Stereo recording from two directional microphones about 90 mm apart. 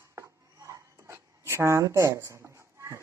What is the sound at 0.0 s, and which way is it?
Writing, 35° right (ahead or behind).